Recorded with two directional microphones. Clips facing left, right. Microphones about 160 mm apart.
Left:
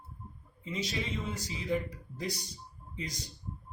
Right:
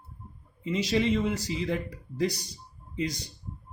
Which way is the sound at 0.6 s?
80° right.